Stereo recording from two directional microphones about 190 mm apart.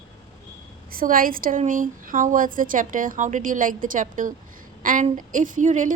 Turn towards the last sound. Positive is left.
turn(degrees=-40)  # may be behind; listen again after turning